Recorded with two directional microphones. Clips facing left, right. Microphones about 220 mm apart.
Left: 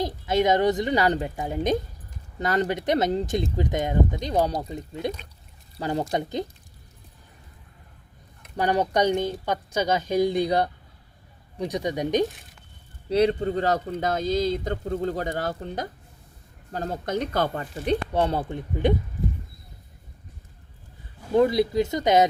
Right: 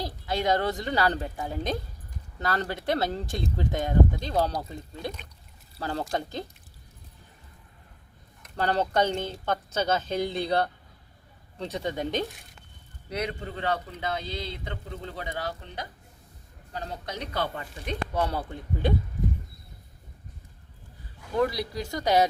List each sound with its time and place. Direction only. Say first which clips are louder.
0.0 s speech: left 6 dB; 20° left (ahead or behind)
8.4 s speech: left 3 dB; 15° left (ahead or behind)
13.1 s a man's voice: left 11 dB; 30° left (ahead or behind)
18.1 s speech: left 5 dB; 25° left (ahead or behind)
21.3 s speech: left 7 dB; 25° left (ahead or behind)